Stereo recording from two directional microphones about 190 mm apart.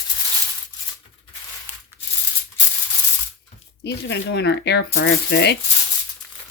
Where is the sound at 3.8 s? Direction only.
65° left (ahead or behind).